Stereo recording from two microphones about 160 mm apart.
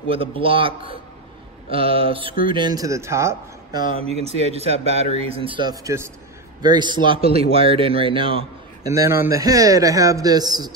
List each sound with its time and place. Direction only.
0.1 s a man's voice: 35° right (ahead or behind); by 3.8 s 20° right (ahead or behind)
3.9 s a man's voice: 40° right (ahead or behind)
8.8 s a man's voice: 20° right (ahead or behind)